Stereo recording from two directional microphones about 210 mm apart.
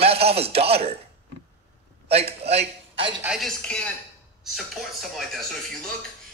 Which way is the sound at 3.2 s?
Centre (ahead or behind).